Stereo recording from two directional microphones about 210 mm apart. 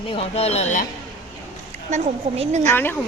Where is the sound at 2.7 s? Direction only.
10° left (ahead or behind).